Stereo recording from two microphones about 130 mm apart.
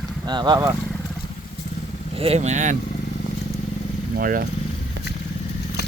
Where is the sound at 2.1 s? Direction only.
50° right (ahead or behind); by 2.7 s 70° right (ahead or behind).